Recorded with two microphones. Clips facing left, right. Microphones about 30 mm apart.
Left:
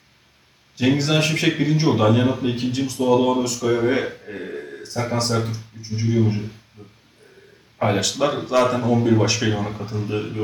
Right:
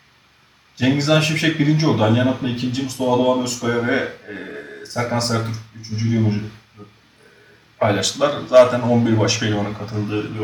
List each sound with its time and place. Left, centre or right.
0.9 s a man's voice: centre
6.8 s music: right
7.8 s a man's voice: centre